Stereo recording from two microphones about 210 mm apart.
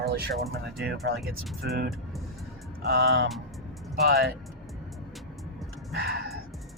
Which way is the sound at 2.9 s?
50° right (ahead or behind).